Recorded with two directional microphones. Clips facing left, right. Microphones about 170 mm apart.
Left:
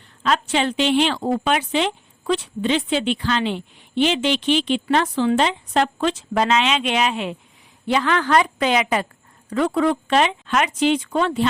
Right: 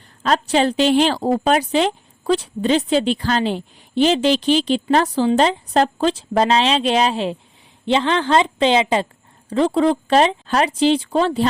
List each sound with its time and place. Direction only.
0.2 s a woman's voice: 35° right (ahead or behind)